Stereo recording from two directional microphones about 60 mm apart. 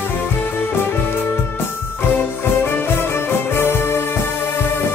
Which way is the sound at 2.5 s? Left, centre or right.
Left.